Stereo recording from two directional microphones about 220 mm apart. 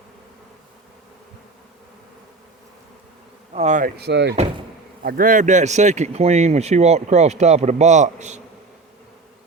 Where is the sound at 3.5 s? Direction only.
35° right (ahead or behind).